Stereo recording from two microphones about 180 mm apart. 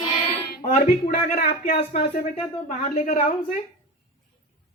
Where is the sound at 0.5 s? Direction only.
55° left (ahead or behind).